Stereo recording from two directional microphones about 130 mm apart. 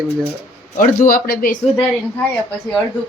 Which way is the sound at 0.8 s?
90° left.